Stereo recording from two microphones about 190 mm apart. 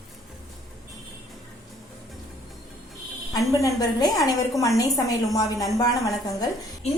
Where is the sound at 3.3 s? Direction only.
20° left (ahead or behind).